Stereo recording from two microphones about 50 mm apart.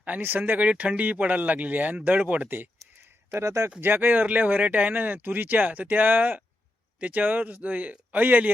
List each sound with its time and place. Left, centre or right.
0.0 s speech: right
3.4 s speech: right
3.8 s speech: right